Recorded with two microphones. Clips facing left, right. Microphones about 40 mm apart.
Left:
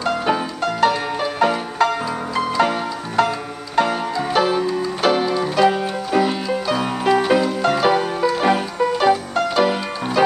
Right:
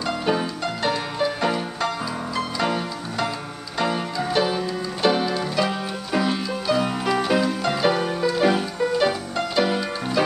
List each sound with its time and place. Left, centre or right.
0.0 s music: centre
3.7 s music: left